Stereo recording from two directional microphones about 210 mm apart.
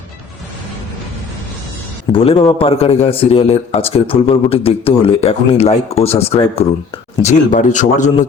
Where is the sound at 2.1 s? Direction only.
25° left (ahead or behind).